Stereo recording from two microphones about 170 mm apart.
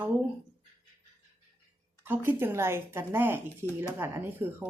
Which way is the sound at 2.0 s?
10° right (ahead or behind).